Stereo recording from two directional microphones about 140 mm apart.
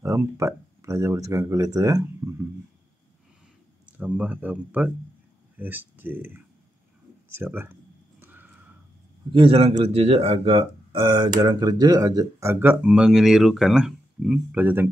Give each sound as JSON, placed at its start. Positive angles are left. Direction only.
{"t": 0.0, "sound": "speech", "side_deg": -20}
{"t": 3.8, "sound": "speech", "side_deg": -10}
{"t": 8.2, "sound": "a sound", "side_deg": -15}
{"t": 9.3, "sound": "a man's voice", "side_deg": -40}